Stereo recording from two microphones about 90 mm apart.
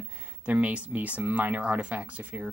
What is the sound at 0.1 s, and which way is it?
Speech, 15° right (ahead or behind).